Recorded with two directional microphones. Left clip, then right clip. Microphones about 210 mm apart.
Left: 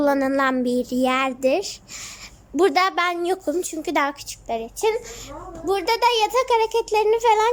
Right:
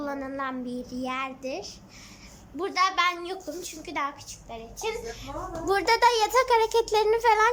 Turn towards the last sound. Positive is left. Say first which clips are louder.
# left 4 dB
turn(degrees=15)  # may be behind; listen again after turning